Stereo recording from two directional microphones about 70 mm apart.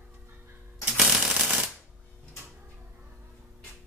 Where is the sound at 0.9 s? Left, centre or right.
Centre.